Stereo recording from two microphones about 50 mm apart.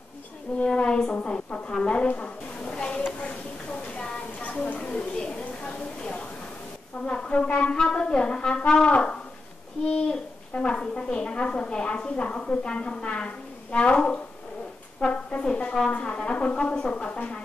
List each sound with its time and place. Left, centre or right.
0.7 s brass instrument: centre
1.1 s a sound: left
7.1 s brass instrument: left
10.5 s a woman's voice: left